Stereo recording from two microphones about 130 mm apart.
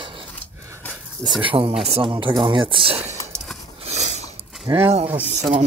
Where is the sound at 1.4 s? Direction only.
40° right (ahead or behind).